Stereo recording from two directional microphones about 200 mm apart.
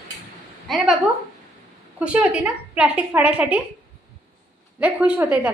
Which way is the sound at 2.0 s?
5° right (ahead or behind).